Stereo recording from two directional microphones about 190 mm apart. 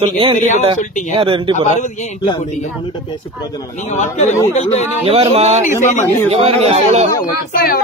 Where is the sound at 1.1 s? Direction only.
25° right (ahead or behind).